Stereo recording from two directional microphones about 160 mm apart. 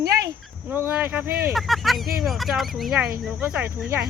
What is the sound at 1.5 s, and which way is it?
Speech, centre (ahead or behind).